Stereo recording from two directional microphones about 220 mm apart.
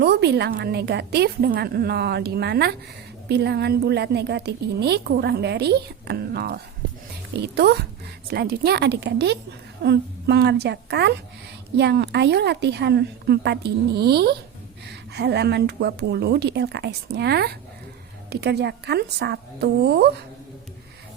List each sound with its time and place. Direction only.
0.0 s a woman's voice: 50° right (ahead or behind)